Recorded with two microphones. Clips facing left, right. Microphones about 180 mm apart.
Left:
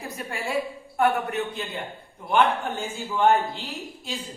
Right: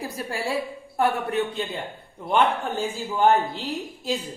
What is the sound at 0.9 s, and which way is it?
A man's voice, 30° right (ahead or behind).